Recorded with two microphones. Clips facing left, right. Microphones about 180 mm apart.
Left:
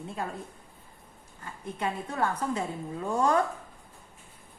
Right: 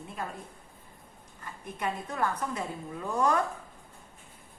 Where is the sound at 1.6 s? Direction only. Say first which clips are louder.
Left 2 dB; 30° left (ahead or behind).